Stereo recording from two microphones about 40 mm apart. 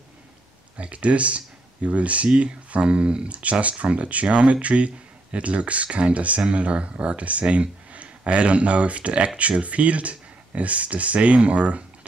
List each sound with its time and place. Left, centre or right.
0.7 s speech: right